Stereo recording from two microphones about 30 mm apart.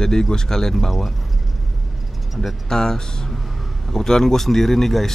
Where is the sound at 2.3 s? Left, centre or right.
Centre.